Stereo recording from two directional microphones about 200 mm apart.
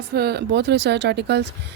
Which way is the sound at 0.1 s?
55° right (ahead or behind).